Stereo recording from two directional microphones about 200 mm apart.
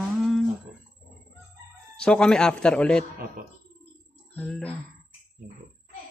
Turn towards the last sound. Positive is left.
turn(degrees=5)  # may be behind; listen again after turning